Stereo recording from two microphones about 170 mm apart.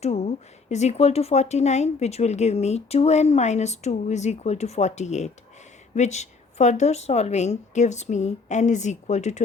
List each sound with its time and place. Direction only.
0.0 s speech: 40° left (ahead or behind)